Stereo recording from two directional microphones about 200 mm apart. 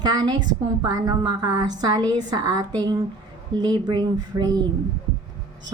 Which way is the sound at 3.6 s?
20° right (ahead or behind).